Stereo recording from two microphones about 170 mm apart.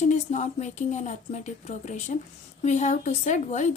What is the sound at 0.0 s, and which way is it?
Speech, 45° left (ahead or behind).